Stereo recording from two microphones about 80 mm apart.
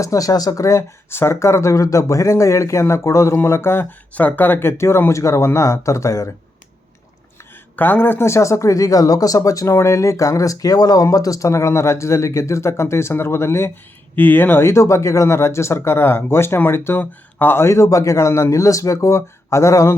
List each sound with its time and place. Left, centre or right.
0.0 s speech: left
7.8 s speech: left